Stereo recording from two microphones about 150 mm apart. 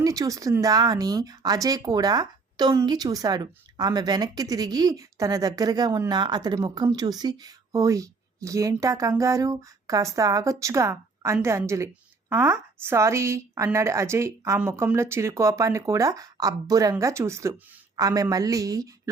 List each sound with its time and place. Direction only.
0.0 s speech: 25° right (ahead or behind)